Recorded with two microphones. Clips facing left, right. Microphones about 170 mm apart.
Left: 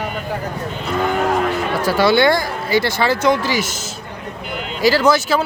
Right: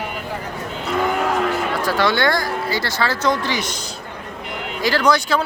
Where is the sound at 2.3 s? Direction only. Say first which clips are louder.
Left 4 dB; 20° left (ahead or behind).